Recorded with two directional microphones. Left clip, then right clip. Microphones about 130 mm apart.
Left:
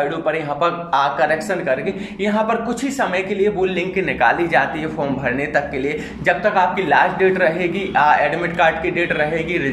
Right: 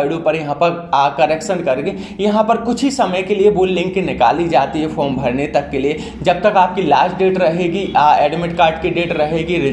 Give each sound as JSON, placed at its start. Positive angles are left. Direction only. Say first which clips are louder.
{"t": 0.2, "sound": "speech", "louder": "right 4 dB", "side_deg": -20}
{"t": 3.0, "sound": "speech", "louder": "right 4 dB", "side_deg": -20}